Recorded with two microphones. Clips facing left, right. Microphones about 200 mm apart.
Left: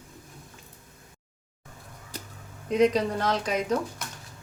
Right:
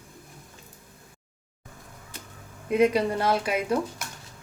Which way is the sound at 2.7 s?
10° right (ahead or behind).